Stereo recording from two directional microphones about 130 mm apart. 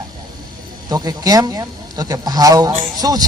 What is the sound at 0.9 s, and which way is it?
A man's voice, 30° right (ahead or behind).